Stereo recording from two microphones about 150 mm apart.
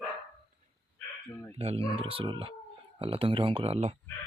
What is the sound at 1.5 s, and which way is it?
Speech, 40° right (ahead or behind).